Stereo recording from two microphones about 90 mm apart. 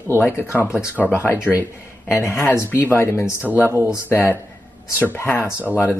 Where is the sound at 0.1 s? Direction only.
25° left (ahead or behind).